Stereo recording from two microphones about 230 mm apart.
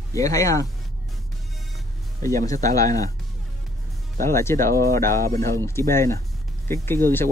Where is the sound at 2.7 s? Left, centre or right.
Centre.